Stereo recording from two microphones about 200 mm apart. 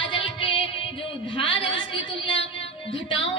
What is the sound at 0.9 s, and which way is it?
A woman's voice, 25° left (ahead or behind).